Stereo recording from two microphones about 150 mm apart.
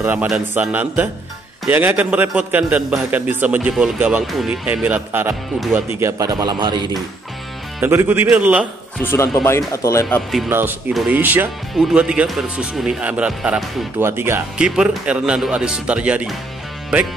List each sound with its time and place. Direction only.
0.0 s a man's voice: 10° right (ahead or behind)
7.8 s speech: 15° right (ahead or behind)
8.9 s speech: 15° left (ahead or behind)
10.0 s speech: centre (ahead or behind)
10.5 s speech: 15° right (ahead or behind)
10.9 s speech: centre (ahead or behind)
11.1 s speech: 15° right (ahead or behind)